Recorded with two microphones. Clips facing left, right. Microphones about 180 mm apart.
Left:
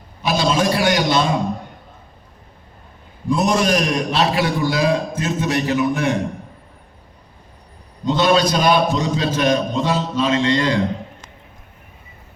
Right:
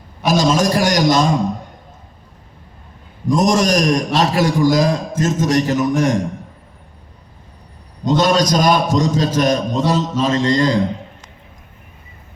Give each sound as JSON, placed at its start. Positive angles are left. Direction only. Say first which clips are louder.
{"t": 0.3, "sound": "a sound", "louder": "right 3 dB", "side_deg": -45}
{"t": 3.2, "sound": "a man's voice", "louder": "right 3 dB", "side_deg": -40}
{"t": 8.0, "sound": "a man's voice", "louder": "right 1 dB", "side_deg": -40}